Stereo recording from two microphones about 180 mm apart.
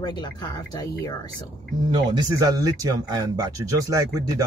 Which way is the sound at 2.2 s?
20° right (ahead or behind).